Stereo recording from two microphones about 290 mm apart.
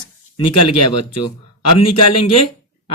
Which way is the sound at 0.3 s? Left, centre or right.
Left.